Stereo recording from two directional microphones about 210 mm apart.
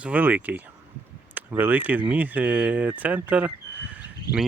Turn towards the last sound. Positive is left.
turn(degrees=-5)  # may be behind; listen again after turning